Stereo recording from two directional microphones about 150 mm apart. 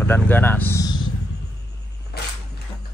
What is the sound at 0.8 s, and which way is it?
Vehicle, 30° left (ahead or behind).